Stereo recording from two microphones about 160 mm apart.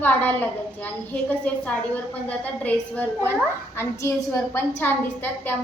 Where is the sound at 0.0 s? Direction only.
10° left (ahead or behind).